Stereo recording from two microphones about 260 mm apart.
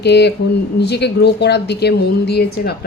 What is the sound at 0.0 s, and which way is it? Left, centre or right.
A woman's voice, left.